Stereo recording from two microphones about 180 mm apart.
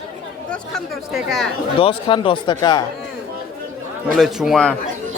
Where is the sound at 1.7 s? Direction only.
30° left (ahead or behind).